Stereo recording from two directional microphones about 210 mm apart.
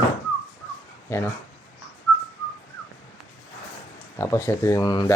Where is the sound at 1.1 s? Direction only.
10° left (ahead or behind).